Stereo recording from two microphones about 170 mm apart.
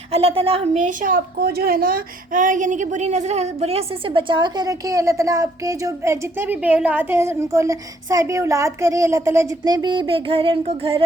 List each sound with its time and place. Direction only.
0.1 s a woman's voice: 35° right (ahead or behind)